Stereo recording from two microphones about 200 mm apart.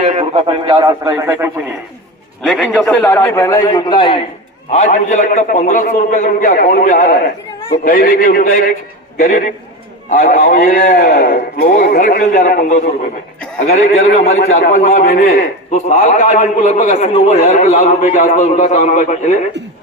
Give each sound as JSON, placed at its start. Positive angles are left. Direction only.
{"t": 0.0, "sound": "a man's voice", "side_deg": -30}
{"t": 2.4, "sound": "a man's voice", "side_deg": 0}
{"t": 4.7, "sound": "a man's voice", "side_deg": 35}